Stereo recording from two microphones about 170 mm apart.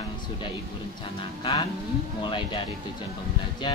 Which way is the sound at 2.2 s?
30° left (ahead or behind).